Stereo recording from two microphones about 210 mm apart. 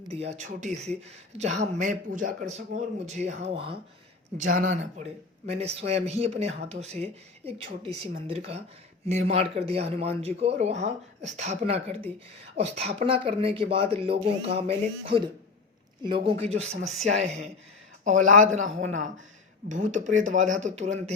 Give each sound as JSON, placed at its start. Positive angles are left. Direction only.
{"t": 0.1, "sound": "speech", "side_deg": -30}
{"t": 4.4, "sound": "a man's voice", "side_deg": -40}
{"t": 18.0, "sound": "speech", "side_deg": -35}